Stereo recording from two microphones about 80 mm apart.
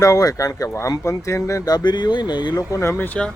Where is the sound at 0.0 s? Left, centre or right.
Left.